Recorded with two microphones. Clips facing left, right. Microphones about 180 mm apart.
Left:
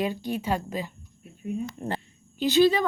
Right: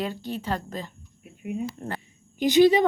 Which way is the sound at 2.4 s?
15° right (ahead or behind).